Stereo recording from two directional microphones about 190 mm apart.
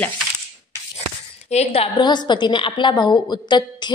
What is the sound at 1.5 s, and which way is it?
A woman's voice, 35° left (ahead or behind).